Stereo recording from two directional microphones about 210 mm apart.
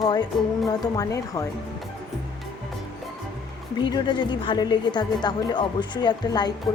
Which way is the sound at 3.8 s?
20° left (ahead or behind).